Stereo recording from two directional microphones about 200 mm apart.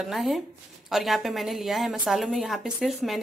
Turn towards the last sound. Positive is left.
turn(degrees=0)  # may be behind; listen again after turning